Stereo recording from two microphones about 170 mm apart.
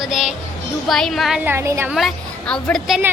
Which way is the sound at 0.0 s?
Centre (ahead or behind).